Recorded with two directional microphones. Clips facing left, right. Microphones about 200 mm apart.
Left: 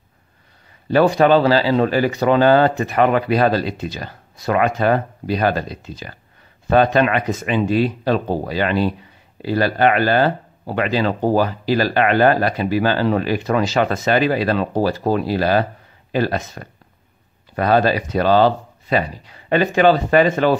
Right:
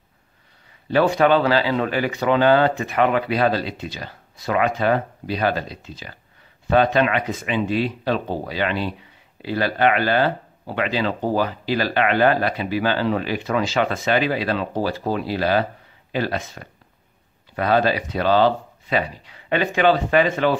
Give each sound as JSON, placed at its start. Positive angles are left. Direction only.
{"t": 0.8, "sound": "speech", "side_deg": 40}